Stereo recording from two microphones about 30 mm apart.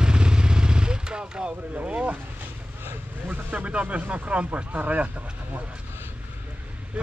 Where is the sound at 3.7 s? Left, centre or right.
Right.